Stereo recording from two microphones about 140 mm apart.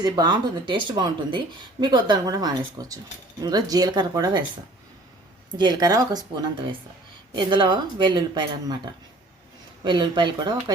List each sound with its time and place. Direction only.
0.0 s a woman's voice: 30° right (ahead or behind)
5.5 s a woman's voice: 30° right (ahead or behind)